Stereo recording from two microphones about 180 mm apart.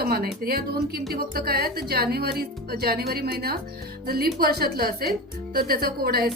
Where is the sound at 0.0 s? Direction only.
60° right (ahead or behind).